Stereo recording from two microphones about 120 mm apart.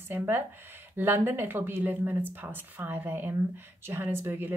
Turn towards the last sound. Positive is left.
turn(degrees=-20)  # may be behind; listen again after turning